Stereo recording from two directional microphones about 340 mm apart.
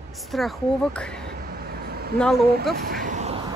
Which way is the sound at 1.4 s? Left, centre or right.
Right.